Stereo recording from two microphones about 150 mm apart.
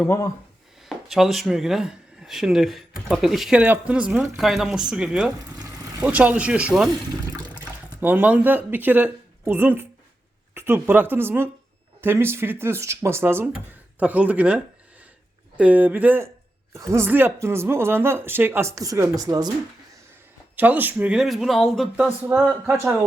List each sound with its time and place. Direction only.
0.9 s speech: centre (ahead or behind)
5.5 s a sound: 25° right (ahead or behind)
6.1 s speech: 10° right (ahead or behind)
7.3 s toilet flush: 30° right (ahead or behind)
8.0 s speech: 10° right (ahead or behind)
20.6 s speech: 10° right (ahead or behind)
22.3 s speech: 15° right (ahead or behind)